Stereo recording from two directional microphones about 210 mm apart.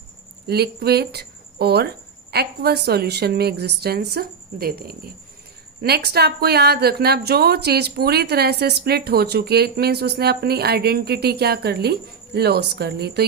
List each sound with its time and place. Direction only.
0.4 s a woman's voice: 50° right (ahead or behind)